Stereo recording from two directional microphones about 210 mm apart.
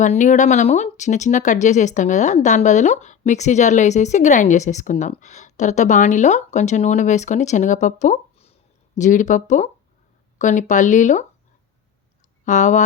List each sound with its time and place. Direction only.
0.0 s speech: 35° left (ahead or behind)
12.5 s speech: 35° left (ahead or behind)